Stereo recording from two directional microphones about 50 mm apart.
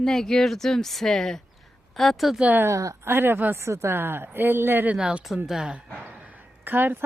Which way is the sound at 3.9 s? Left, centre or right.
Right.